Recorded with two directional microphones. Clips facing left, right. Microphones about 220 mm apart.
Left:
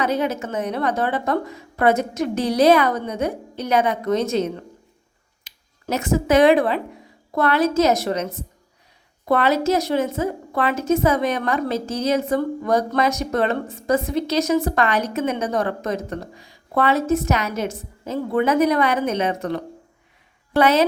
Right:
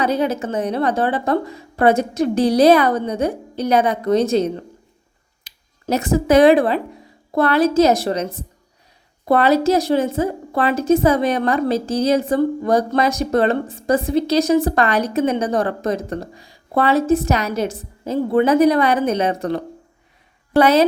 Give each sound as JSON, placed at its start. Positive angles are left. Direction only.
{"t": 0.0, "sound": "a woman's voice", "side_deg": -35}